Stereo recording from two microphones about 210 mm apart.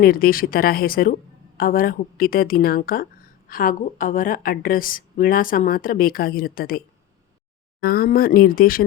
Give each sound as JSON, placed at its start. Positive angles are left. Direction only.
{"t": 0.0, "sound": "a woman's voice", "side_deg": 45}